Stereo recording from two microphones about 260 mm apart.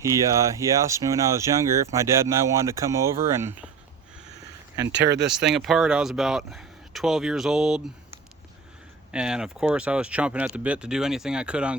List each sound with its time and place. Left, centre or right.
0.0 s speech: centre
4.9 s speech: right
5.3 s speech: centre